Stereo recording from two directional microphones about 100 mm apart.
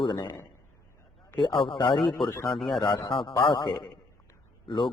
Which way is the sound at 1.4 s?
55° left (ahead or behind).